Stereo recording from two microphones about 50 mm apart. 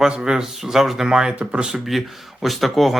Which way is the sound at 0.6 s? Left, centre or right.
Centre.